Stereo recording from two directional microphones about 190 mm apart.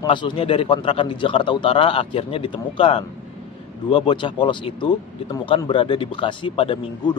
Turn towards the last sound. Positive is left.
turn(degrees=25)  # may be behind; listen again after turning